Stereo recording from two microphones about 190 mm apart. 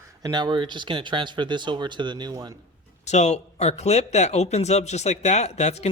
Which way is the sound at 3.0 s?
35° left (ahead or behind).